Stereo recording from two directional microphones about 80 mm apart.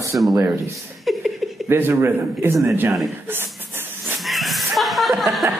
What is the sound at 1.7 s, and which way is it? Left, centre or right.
Speech, right.